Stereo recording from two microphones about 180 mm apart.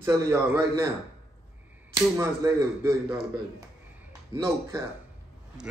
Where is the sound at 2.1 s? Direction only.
15° right (ahead or behind).